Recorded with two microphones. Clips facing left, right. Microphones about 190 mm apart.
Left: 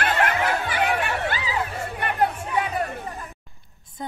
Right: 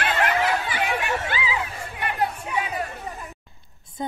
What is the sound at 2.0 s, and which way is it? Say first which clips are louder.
Music: left 2 dB; 50° left (ahead or behind).